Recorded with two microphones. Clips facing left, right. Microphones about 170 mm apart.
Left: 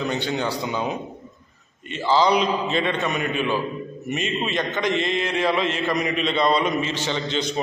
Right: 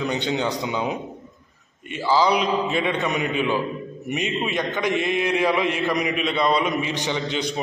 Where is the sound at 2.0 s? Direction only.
5° right (ahead or behind).